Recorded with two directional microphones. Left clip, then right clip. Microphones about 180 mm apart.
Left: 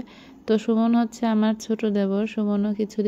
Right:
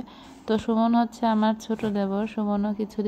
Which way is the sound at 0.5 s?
30° left (ahead or behind).